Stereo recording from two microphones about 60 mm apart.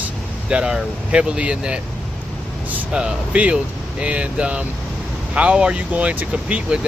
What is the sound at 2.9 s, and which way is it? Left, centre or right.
Speech, centre.